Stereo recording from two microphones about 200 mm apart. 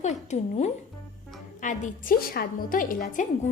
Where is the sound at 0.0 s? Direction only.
35° left (ahead or behind).